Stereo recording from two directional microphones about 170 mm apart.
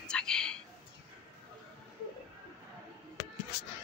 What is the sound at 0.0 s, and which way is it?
Whispering, 5° left (ahead or behind).